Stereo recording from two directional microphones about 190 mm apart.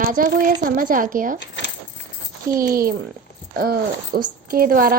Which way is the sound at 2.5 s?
50° right (ahead or behind).